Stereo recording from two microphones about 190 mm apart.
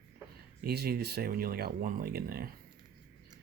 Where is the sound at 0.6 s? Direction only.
55° right (ahead or behind).